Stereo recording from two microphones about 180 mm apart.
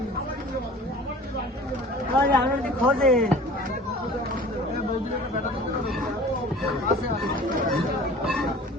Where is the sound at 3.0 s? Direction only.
Centre (ahead or behind).